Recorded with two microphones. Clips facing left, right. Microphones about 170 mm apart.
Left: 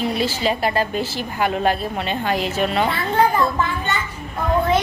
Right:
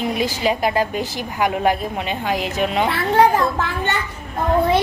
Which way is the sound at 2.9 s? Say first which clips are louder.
Right 3 dB; 80° right.